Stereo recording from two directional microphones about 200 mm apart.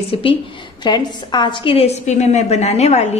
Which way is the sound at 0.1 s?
25° left (ahead or behind).